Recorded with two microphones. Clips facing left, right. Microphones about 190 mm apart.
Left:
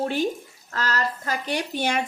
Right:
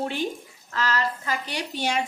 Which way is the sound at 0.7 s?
45° left (ahead or behind).